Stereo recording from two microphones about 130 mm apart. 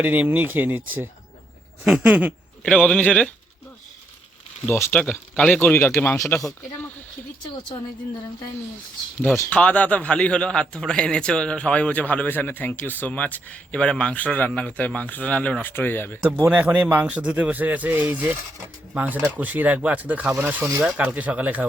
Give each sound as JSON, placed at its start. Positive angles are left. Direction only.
{"t": 0.0, "sound": "speech", "side_deg": -15}
{"t": 2.6, "sound": "a man's voice", "side_deg": 5}
{"t": 4.6, "sound": "a man's voice", "side_deg": 15}
{"t": 9.5, "sound": "a man's voice", "side_deg": 10}
{"t": 16.2, "sound": "speech", "side_deg": -15}